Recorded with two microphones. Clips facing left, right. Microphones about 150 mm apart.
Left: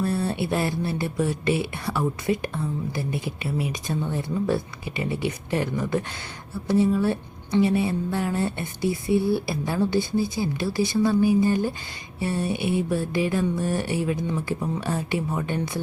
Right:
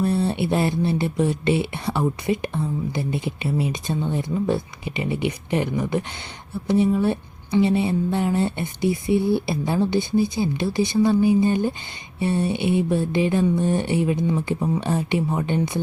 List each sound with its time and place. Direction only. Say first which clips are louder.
0.0 s speech: right 3 dB; 20° right (ahead or behind)